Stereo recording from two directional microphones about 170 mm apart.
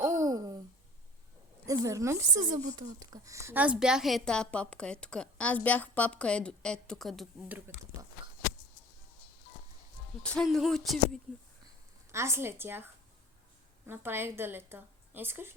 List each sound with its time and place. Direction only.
0.0 s a sound: 20° right (ahead or behind)
1.6 s a woman's voice: 20° right (ahead or behind); by 7.4 s centre (ahead or behind)
10.2 s a woman's voice: 5° left (ahead or behind)
12.1 s a woman's voice: 15° right (ahead or behind)